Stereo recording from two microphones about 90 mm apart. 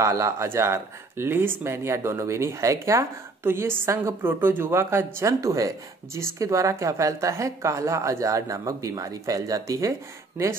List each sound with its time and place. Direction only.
0.0 s speech: 35° right (ahead or behind)